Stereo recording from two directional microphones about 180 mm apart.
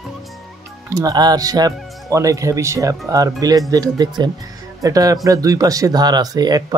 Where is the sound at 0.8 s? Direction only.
20° right (ahead or behind).